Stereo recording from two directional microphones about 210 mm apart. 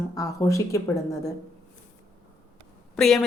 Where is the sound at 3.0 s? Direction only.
Centre (ahead or behind).